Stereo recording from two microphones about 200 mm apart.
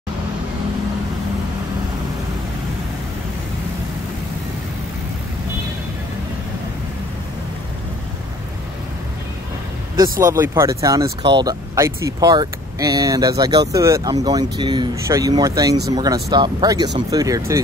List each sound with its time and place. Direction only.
10.2 s speech: 15° right (ahead or behind)